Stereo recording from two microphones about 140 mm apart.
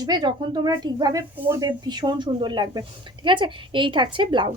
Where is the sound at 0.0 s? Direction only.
30° right (ahead or behind).